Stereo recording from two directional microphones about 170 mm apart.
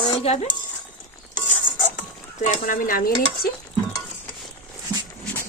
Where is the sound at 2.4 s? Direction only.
50° left (ahead or behind).